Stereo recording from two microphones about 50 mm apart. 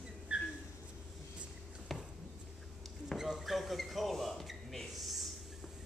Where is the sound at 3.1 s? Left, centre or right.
Centre.